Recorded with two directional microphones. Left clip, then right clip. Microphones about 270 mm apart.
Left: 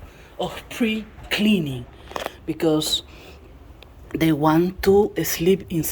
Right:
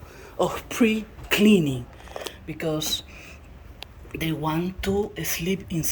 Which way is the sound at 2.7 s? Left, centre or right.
Centre.